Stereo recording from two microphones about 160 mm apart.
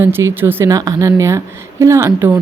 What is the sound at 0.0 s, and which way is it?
Speech, 15° right (ahead or behind).